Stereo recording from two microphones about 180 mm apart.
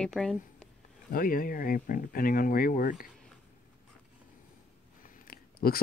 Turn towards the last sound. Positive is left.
turn(degrees=55)  # may be behind; listen again after turning